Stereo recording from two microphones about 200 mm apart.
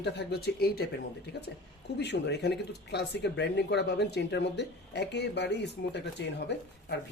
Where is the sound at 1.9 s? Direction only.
60° left (ahead or behind).